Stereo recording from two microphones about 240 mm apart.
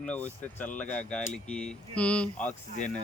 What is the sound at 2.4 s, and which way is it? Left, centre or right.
Speech, left.